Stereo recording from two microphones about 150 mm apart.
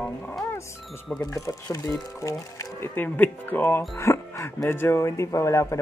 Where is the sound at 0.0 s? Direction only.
10° left (ahead or behind).